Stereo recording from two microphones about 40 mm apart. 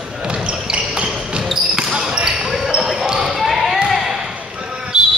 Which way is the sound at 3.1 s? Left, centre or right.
Centre.